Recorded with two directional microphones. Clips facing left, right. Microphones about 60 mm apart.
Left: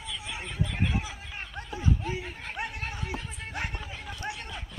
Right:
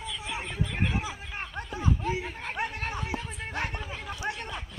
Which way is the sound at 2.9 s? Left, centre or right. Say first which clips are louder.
Right 3 dB; centre.